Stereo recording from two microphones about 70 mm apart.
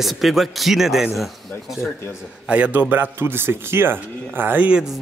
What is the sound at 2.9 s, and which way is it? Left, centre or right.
Speech, right.